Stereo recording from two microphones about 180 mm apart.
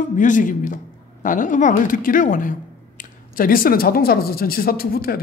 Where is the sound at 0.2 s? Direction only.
45° left (ahead or behind).